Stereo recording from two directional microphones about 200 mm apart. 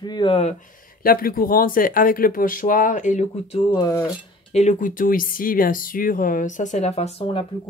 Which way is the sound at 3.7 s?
15° left (ahead or behind).